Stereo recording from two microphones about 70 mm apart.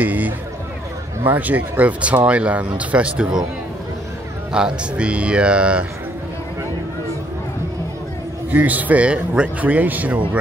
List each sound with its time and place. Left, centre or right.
0.0 s speech: right
4.5 s speech: centre
8.5 s speech: right